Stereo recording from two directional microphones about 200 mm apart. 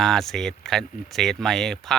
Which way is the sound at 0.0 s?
Centre (ahead or behind).